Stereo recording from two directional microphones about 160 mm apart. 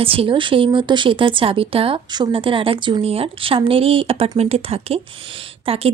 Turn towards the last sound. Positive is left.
turn(degrees=-35)  # may be behind; listen again after turning